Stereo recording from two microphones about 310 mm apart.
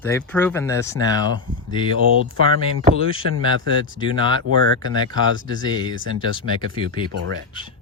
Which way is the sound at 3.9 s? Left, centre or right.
Centre.